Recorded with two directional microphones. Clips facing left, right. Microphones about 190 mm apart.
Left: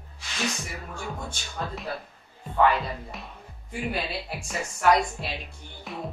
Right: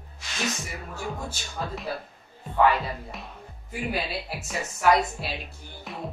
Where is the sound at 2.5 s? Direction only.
Centre (ahead or behind).